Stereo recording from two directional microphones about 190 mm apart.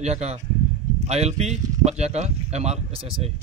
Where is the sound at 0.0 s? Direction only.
35° right (ahead or behind).